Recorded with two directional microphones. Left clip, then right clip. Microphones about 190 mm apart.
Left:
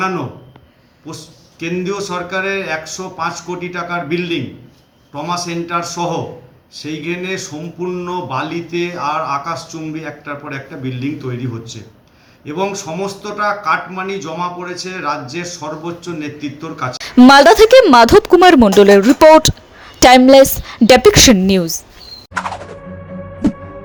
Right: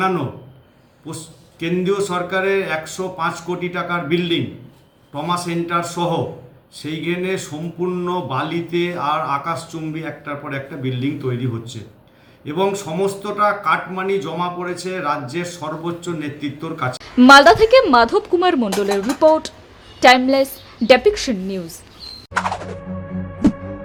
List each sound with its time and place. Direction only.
0.0 s speech: 10° right (ahead or behind)
17.0 s speech: 40° left (ahead or behind)
22.4 s music: centre (ahead or behind)